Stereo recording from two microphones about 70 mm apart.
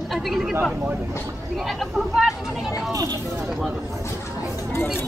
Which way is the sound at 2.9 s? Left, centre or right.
Right.